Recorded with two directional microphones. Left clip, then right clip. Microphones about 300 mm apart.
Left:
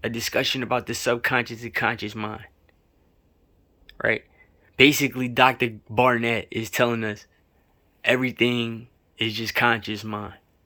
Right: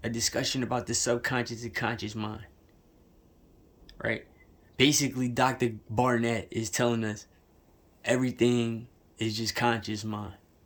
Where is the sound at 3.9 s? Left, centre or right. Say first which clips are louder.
Left 8 dB; centre.